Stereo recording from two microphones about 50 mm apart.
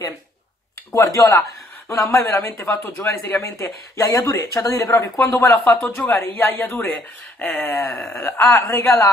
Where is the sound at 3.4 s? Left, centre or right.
Left.